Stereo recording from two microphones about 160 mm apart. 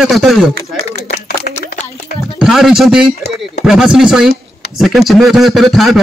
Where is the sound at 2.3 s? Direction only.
5° right (ahead or behind).